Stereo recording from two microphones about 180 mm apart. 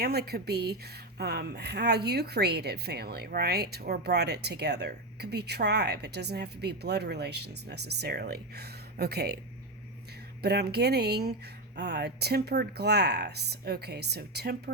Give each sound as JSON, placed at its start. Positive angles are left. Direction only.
{"t": 0.0, "sound": "a woman's voice", "side_deg": -60}
{"t": 10.4, "sound": "a woman's voice", "side_deg": -65}